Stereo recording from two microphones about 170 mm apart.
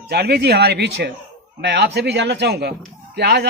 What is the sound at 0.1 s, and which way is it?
Speech, 70° right (ahead or behind).